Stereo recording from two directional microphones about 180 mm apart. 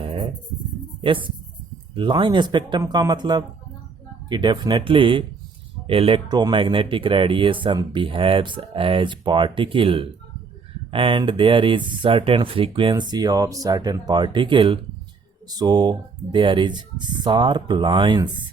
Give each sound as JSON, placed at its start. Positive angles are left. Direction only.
{"t": 0.0, "sound": "music", "side_deg": -30}
{"t": 1.0, "sound": "speech", "side_deg": -30}